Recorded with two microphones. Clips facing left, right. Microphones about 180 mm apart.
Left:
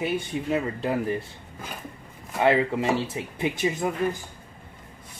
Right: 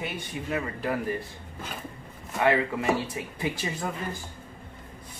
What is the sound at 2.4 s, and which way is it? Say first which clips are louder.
Speech: left 2 dB; 25° left (ahead or behind).